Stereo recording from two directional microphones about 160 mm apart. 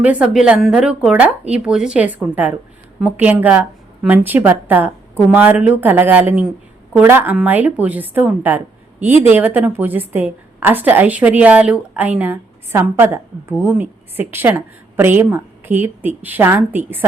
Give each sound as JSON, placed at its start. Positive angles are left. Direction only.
{"t": 0.0, "sound": "a woman's voice", "side_deg": -5}